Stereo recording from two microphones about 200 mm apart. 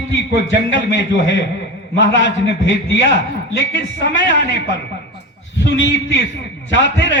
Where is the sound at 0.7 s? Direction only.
60° left (ahead or behind).